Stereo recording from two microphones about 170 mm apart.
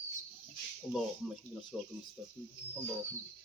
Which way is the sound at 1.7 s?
5° left (ahead or behind).